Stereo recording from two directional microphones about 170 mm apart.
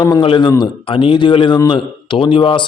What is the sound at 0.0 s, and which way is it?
Speech, 30° left (ahead or behind).